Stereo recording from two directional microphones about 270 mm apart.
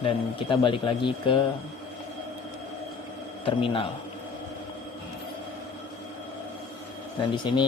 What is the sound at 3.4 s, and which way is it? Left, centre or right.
Speech, centre.